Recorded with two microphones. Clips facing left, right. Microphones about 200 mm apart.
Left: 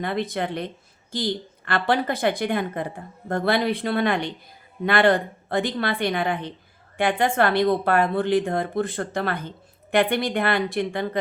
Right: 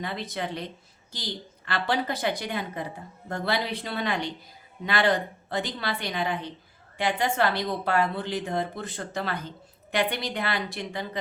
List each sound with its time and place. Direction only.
0.0 s a woman's voice: 55° left (ahead or behind)